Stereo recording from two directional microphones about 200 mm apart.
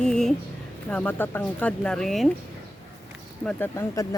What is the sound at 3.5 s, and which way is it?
Speech, 10° left (ahead or behind).